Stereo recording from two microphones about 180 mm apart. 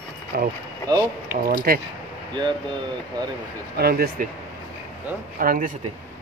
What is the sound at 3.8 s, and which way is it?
Speech, 55° right (ahead or behind).